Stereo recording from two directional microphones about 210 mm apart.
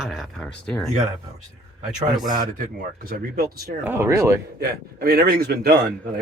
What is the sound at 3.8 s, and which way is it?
Speech, 10° right (ahead or behind).